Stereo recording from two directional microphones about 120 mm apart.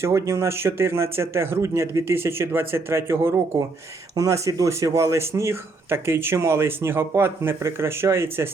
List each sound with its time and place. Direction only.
0.0 s speech: 25° right (ahead or behind)